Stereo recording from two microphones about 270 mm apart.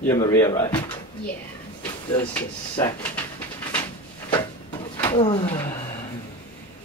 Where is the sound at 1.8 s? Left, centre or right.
Centre.